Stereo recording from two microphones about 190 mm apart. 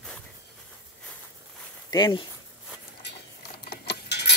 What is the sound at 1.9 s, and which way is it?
Speech, 25° left (ahead or behind).